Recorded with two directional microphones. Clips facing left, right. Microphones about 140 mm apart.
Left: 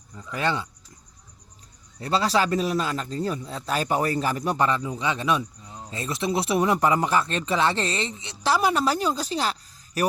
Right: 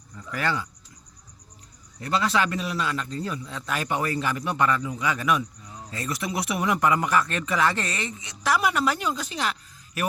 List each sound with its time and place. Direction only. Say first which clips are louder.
0.2 s speech: left 2 dB; 20° left (ahead or behind)
2.0 s speech: left 2 dB; 30° left (ahead or behind)